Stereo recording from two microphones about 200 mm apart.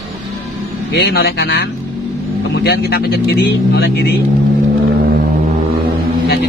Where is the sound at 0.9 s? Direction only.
50° left (ahead or behind).